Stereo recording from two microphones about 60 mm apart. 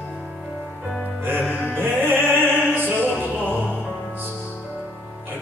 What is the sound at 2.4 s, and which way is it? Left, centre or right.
Opera, right.